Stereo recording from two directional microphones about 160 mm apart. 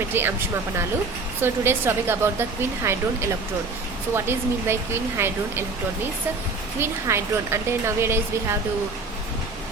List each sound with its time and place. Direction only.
0.1 s speech: 15° right (ahead or behind)
1.4 s speech: 15° right (ahead or behind)
6.7 s speech: 15° right (ahead or behind)